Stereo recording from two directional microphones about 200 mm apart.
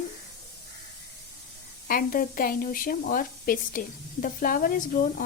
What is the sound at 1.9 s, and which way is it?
A woman's voice, 45° left (ahead or behind).